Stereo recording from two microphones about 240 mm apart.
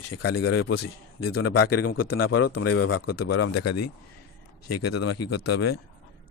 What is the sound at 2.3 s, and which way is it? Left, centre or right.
Speech, left.